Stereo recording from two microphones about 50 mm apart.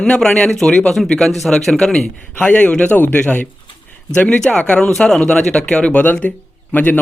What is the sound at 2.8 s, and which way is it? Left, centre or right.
Speech, left.